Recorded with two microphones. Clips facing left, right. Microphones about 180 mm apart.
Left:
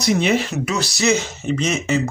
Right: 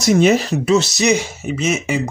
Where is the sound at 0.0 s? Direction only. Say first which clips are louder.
Right 5 dB; 40° right (ahead or behind).